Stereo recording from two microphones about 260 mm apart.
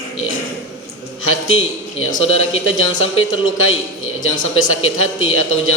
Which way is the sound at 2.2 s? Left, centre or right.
Left.